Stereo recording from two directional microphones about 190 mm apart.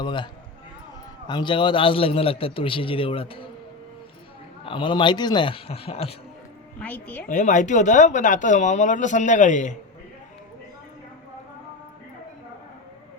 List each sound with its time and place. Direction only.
0.0 s a man's voice: 25° left (ahead or behind)
1.3 s a man's voice: 25° left (ahead or behind)
4.6 s a man's voice: 25° left (ahead or behind)
6.7 s speech: 10° left (ahead or behind)
7.3 s speech: 40° left (ahead or behind)